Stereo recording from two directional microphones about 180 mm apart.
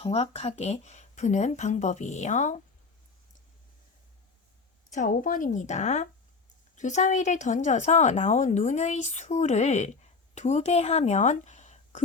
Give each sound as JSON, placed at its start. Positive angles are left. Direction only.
{"t": 0.0, "sound": "a woman's voice", "side_deg": 35}
{"t": 4.9, "sound": "a woman's voice", "side_deg": 45}